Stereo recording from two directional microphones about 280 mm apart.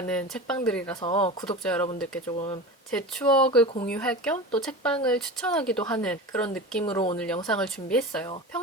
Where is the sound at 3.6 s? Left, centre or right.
Centre.